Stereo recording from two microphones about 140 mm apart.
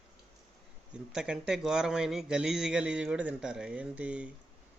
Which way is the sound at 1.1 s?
5° right (ahead or behind).